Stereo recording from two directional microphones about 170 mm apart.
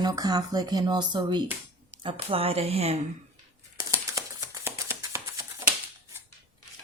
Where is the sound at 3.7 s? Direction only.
20° right (ahead or behind).